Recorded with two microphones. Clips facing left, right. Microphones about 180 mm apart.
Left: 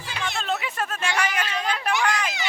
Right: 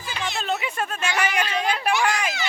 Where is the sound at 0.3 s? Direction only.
Centre (ahead or behind).